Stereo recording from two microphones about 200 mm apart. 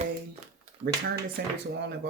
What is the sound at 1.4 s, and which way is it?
Speech, 50° right (ahead or behind).